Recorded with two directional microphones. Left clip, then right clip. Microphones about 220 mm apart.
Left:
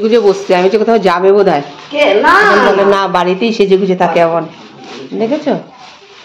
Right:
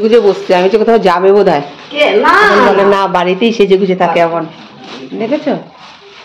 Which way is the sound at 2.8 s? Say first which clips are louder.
Right 1 dB; 5° right (ahead or behind).